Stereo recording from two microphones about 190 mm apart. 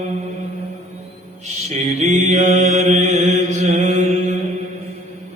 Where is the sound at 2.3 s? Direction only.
35° right (ahead or behind).